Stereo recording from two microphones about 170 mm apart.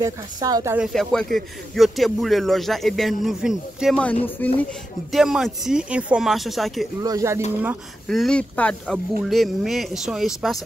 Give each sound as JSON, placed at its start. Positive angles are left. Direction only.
{"t": 0.0, "sound": "speech", "side_deg": -20}
{"t": 0.7, "sound": "a man's voice", "side_deg": 0}
{"t": 7.0, "sound": "speech", "side_deg": -20}
{"t": 8.1, "sound": "a man's voice", "side_deg": 5}